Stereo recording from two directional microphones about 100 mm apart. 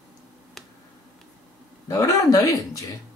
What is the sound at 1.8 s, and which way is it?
A man's voice, 30° left (ahead or behind).